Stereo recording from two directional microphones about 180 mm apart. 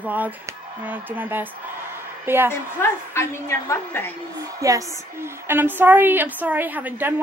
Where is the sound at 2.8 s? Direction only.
15° left (ahead or behind).